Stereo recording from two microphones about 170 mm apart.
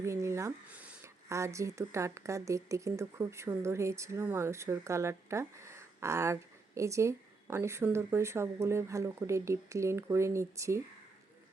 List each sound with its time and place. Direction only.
0.0 s speech: 15° right (ahead or behind)